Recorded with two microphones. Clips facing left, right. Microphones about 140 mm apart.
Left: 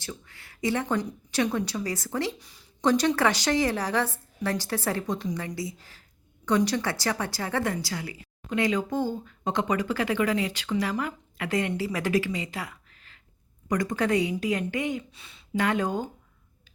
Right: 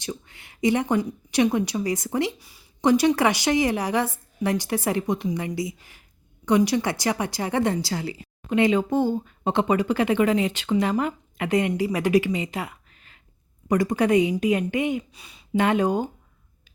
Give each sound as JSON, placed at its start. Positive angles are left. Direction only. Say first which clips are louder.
{"t": 0.0, "sound": "speech", "louder": "right 6 dB", "side_deg": -20}